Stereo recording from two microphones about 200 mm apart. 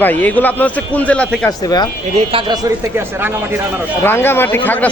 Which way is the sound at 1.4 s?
20° left (ahead or behind).